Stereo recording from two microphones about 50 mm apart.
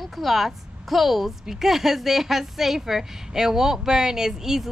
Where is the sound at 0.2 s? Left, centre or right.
Centre.